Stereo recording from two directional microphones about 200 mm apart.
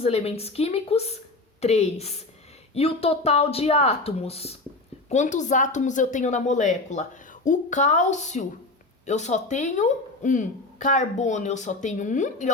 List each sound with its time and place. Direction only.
0.0 s speech: 30° left (ahead or behind)